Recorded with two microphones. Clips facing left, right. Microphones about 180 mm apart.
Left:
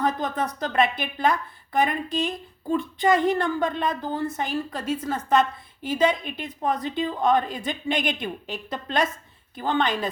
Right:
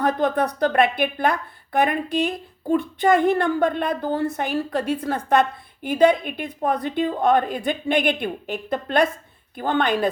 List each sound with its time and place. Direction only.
0.0 s a woman's voice: 60° right (ahead or behind)